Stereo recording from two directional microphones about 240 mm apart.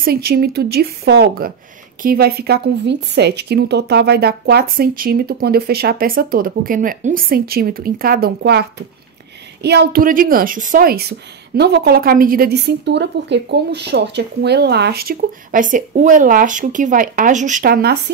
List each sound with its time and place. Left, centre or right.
0.0 s a woman's voice: right